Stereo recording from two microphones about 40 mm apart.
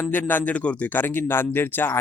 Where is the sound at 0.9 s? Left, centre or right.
Left.